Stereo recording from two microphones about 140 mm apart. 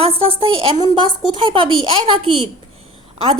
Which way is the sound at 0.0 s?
45° right (ahead or behind).